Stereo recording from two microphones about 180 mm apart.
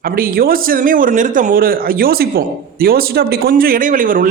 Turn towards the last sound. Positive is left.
turn(degrees=-50)  # may be behind; listen again after turning